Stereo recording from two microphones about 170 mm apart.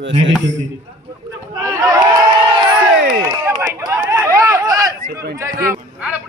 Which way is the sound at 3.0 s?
60° right (ahead or behind).